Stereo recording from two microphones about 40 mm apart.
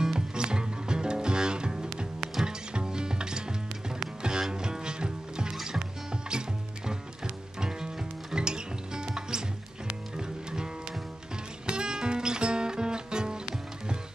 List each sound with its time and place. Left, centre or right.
0.0 s music: centre
2.7 s ratchet: right
4.0 s music: centre
7.6 s music: centre